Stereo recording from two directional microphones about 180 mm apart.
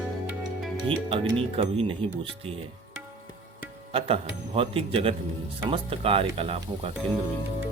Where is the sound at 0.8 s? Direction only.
30° right (ahead or behind).